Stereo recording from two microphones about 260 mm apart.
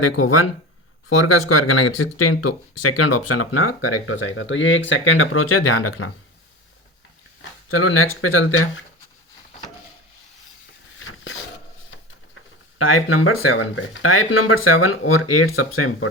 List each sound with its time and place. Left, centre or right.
0.0 s speech: left
7.7 s speech: left
10.9 s a sound: left
12.8 s speech: left